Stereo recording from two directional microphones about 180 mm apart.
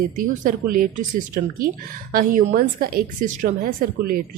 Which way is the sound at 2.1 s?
50° right (ahead or behind).